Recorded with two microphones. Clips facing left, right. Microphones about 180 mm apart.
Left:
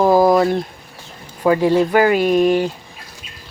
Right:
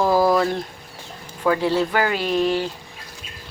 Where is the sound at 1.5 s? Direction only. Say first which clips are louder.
Left 5 dB; 15° left (ahead or behind).